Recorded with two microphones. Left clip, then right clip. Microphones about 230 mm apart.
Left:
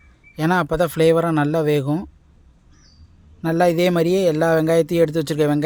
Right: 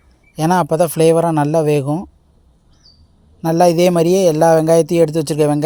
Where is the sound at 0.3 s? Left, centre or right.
Centre.